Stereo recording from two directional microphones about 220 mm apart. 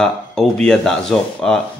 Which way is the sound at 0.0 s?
5° left (ahead or behind).